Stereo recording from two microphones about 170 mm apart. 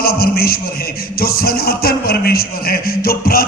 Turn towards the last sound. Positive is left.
turn(degrees=60)  # may be behind; listen again after turning